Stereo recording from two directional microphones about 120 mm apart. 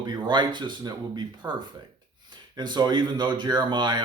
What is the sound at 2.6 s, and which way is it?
Speech, 35° right (ahead or behind).